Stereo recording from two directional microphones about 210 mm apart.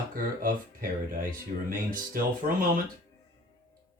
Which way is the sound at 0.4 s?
40° right (ahead or behind).